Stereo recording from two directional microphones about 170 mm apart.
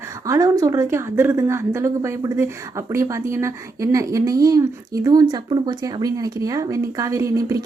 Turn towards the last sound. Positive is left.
turn(degrees=-20)  # may be behind; listen again after turning